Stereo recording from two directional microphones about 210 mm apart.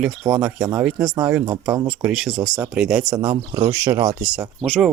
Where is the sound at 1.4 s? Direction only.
20° right (ahead or behind).